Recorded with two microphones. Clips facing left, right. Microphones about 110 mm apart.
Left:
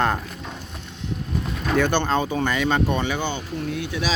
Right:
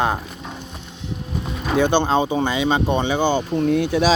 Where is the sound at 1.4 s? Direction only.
5° right (ahead or behind).